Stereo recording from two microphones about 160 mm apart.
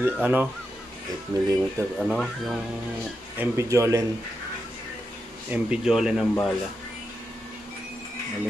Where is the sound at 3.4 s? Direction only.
20° right (ahead or behind).